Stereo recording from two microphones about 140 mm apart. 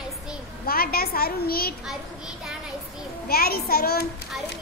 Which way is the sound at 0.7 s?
90° left.